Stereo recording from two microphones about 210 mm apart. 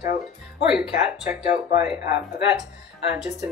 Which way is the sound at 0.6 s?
5° right (ahead or behind).